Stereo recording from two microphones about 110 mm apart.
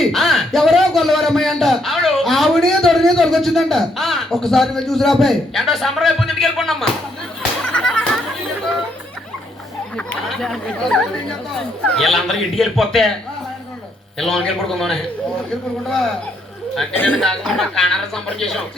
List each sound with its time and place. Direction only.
0.0 s a sound: centre (ahead or behind)
7.6 s music: 5° left (ahead or behind)
10.1 s speech: 5° left (ahead or behind)
14.2 s speech: 5° left (ahead or behind)
16.9 s speech: 15° left (ahead or behind)
17.2 s speech: centre (ahead or behind)